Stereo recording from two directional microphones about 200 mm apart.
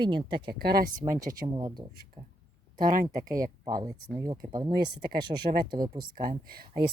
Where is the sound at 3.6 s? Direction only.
20° right (ahead or behind).